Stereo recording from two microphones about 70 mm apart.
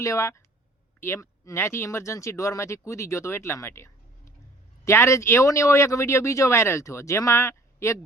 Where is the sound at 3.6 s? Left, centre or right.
Left.